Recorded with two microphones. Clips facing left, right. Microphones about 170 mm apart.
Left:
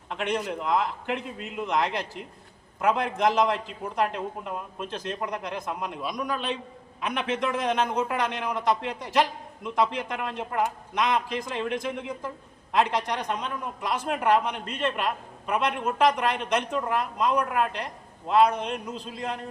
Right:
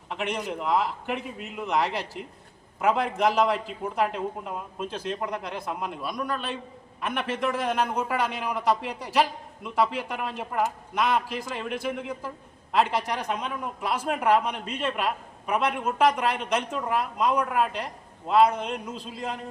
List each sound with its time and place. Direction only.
0.1 s a man's voice: 5° right (ahead or behind)